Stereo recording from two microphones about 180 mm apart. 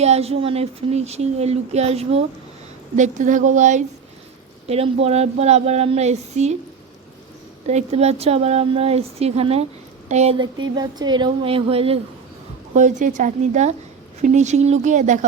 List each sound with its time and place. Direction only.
0.0 s a woman's voice: 35° right (ahead or behind)
7.7 s speech: 35° right (ahead or behind)
12.7 s a woman's voice: 45° right (ahead or behind)